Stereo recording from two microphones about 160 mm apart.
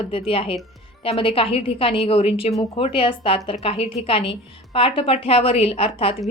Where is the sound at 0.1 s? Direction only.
35° left (ahead or behind).